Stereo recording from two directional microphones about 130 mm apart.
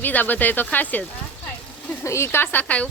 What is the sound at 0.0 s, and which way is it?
Speech, 15° left (ahead or behind).